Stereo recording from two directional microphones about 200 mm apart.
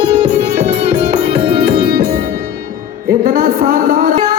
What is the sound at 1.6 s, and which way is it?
Music, 50° right (ahead or behind).